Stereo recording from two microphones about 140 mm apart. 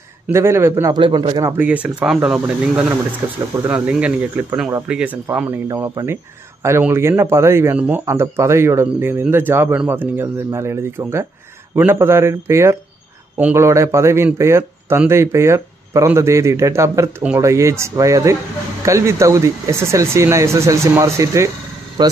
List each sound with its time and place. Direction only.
0.3 s speech: 20° right (ahead or behind)
0.9 s a man's voice: 35° right (ahead or behind)
1.6 s speech: 10° right (ahead or behind)
5.7 s speech: 20° right (ahead or behind)